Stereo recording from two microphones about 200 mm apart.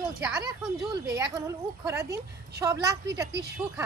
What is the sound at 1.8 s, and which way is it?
Speech, 15° right (ahead or behind).